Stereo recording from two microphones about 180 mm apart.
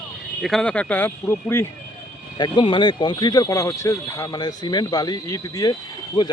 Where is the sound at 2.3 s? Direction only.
25° left (ahead or behind).